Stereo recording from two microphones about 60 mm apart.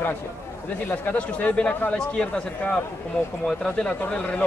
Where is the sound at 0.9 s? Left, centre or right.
Left.